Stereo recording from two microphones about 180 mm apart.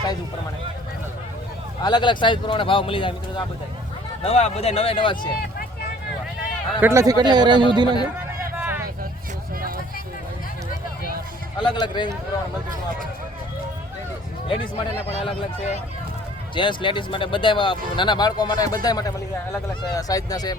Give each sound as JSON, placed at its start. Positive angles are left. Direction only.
{"t": 1.8, "sound": "speech", "side_deg": 25}
{"t": 6.7, "sound": "speech", "side_deg": -15}
{"t": 8.5, "sound": "vehicle", "side_deg": -10}
{"t": 9.6, "sound": "a sound", "side_deg": -55}
{"t": 11.6, "sound": "speech", "side_deg": 25}
{"t": 14.4, "sound": "speech", "side_deg": 30}
{"t": 16.6, "sound": "speech", "side_deg": 25}